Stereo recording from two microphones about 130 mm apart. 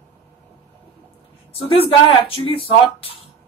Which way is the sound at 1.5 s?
45° left (ahead or behind).